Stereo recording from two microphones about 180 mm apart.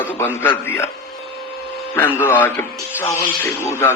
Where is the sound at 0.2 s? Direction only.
10° left (ahead or behind).